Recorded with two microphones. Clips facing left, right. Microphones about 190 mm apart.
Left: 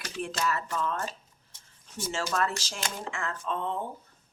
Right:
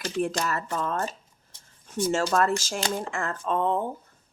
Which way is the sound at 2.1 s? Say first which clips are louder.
Right 6 dB; 45° right (ahead or behind).